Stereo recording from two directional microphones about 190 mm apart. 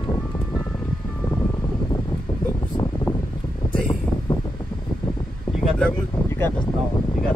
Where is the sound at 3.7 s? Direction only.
25° left (ahead or behind).